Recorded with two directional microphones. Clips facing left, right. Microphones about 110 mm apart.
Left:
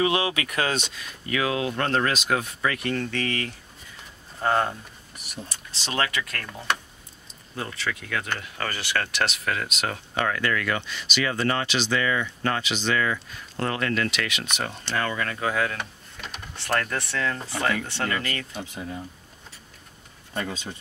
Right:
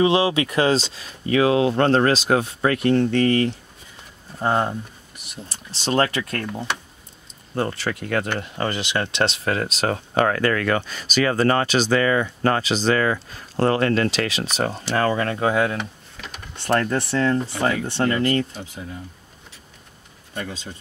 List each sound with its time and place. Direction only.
0.0 s speech: 25° right (ahead or behind)
4.4 s speech: 20° right (ahead or behind)
5.5 s speech: 35° right (ahead or behind)
7.5 s speech: 45° right (ahead or behind)
8.4 s speech: 25° right (ahead or behind)
15.8 s a sound: centre (ahead or behind)
16.6 s speech: 25° right (ahead or behind)